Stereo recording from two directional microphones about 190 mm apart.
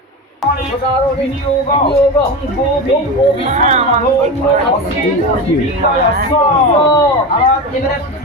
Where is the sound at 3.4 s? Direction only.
40° right (ahead or behind).